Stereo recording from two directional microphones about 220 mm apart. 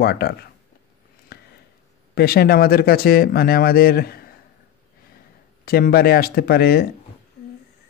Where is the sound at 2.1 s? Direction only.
45° left (ahead or behind).